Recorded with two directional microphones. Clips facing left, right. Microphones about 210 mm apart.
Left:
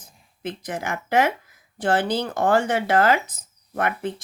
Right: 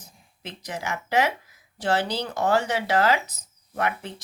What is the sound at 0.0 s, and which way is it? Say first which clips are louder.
A woman's voice: left 9 dB; 50° left (ahead or behind).